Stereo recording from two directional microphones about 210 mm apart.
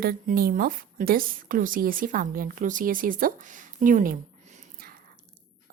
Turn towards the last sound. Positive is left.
turn(degrees=-40)  # may be behind; listen again after turning